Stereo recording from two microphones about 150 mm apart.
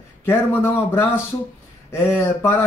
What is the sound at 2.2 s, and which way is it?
Speech, 15° left (ahead or behind).